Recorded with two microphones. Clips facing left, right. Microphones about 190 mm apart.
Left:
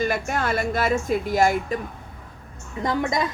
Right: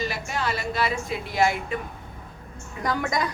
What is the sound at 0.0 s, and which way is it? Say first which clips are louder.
A woman's voice: left 4 dB; 50° left (ahead or behind).